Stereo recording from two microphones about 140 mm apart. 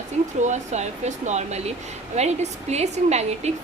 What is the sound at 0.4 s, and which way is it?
Speech, 55° right (ahead or behind).